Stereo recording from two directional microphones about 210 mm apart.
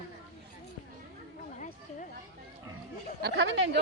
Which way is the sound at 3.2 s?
60° right (ahead or behind).